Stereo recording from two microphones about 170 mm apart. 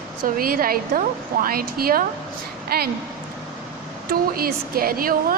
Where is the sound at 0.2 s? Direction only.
60° right (ahead or behind).